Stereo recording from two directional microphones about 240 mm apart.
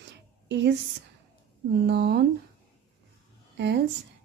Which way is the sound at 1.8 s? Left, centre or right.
Right.